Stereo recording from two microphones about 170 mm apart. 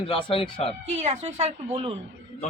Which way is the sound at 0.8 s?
40° right (ahead or behind).